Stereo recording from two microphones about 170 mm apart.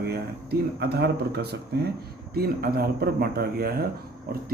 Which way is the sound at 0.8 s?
70° right (ahead or behind).